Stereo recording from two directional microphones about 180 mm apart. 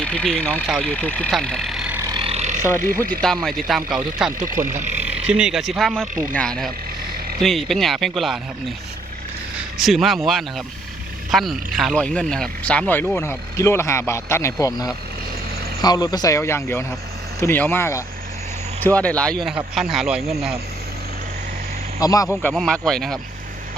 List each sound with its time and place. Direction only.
0.0 s speech: 5° left (ahead or behind)
2.0 s vehicle: 25° right (ahead or behind)
3.0 s speech: 5° left (ahead or behind)
4.6 s speech: 15° right (ahead or behind); by 6.1 s centre (ahead or behind)
7.4 s speech: centre (ahead or behind)
9.8 s speech: centre (ahead or behind); by 14.7 s 15° left (ahead or behind)
15.8 s a man's voice: 20° left (ahead or behind); by 20.3 s 5° right (ahead or behind)
22.0 s a man's voice: 20° left (ahead or behind)
22.4 s speech: 5° left (ahead or behind)